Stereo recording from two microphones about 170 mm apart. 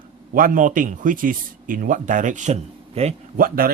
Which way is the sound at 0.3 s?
55° right (ahead or behind).